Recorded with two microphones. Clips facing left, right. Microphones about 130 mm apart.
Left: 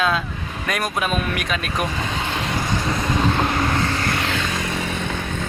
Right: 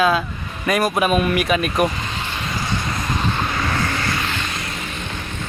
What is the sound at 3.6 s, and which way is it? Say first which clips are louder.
Vehicle: left 1 dB; 25° left (ahead or behind).